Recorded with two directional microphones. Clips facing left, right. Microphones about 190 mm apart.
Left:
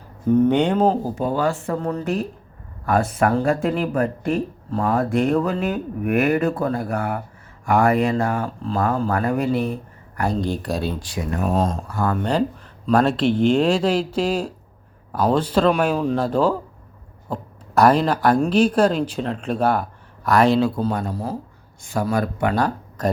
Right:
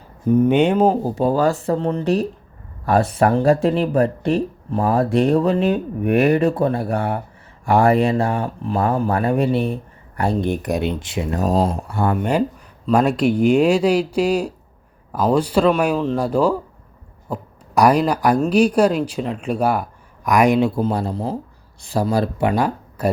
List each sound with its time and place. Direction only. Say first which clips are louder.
0.3 s speech: right 2 dB; 10° right (ahead or behind)
1.1 s speech: right 4 dB; 35° right (ahead or behind)
4.7 s speech: right 3 dB; 20° right (ahead or behind)
11.3 s speech: right 3 dB; 35° right (ahead or behind)
11.6 s speech: right 2 dB; 10° right (ahead or behind)
11.9 s speech: right 2 dB; 25° right (ahead or behind)
12.1 s speech: even; 15° right (ahead or behind)